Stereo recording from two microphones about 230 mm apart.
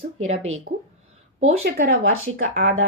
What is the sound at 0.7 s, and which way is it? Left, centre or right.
Speech, right.